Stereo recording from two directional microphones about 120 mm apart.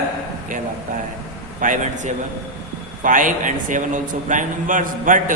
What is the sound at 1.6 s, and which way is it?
A man's voice, 90° right.